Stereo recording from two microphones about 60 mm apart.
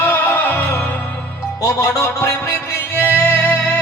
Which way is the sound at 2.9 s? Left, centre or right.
Left.